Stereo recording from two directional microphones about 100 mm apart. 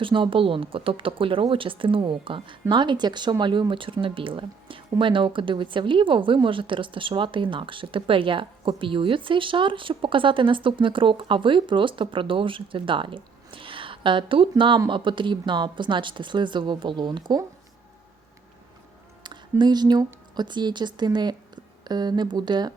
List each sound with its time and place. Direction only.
0.0 s speech: 55° right (ahead or behind)
19.2 s speech: 50° right (ahead or behind)